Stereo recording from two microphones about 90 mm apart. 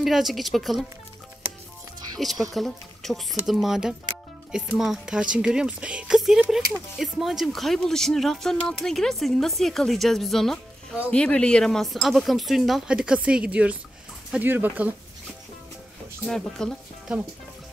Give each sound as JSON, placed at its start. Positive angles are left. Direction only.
{"t": 0.0, "sound": "speech", "side_deg": 0}
{"t": 2.1, "sound": "speech", "side_deg": 0}
{"t": 16.3, "sound": "speech", "side_deg": 5}